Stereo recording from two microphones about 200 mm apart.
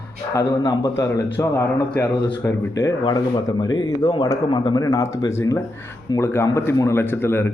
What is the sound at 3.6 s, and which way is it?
Speech, 20° left (ahead or behind).